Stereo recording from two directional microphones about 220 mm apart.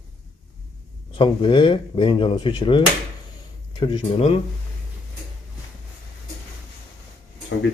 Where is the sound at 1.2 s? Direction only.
20° left (ahead or behind).